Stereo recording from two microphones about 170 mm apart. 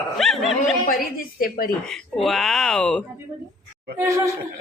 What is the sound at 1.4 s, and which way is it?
Speech, 55° left (ahead or behind).